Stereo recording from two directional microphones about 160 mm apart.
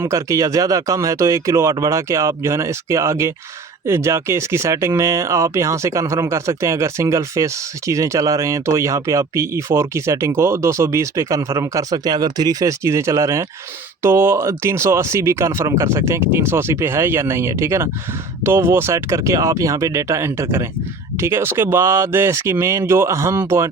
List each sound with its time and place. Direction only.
0.0 s speech: 20° right (ahead or behind)